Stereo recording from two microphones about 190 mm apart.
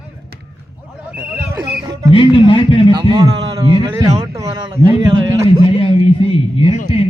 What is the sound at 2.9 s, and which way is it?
Speech, 25° right (ahead or behind).